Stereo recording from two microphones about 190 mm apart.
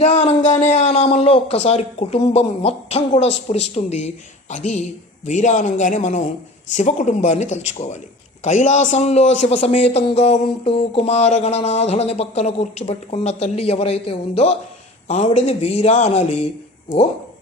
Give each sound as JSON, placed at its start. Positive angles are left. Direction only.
{"t": 0.0, "sound": "speech", "side_deg": 35}